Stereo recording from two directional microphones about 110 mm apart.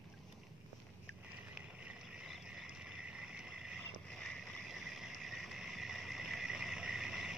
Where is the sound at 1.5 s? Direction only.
10° right (ahead or behind).